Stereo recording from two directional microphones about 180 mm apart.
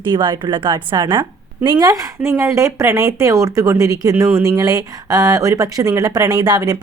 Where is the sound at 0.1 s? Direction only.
25° right (ahead or behind).